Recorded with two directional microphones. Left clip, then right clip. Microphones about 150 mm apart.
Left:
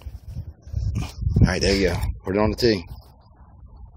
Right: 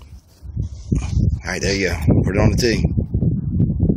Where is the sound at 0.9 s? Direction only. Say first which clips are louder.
Right 4 dB; centre (ahead or behind).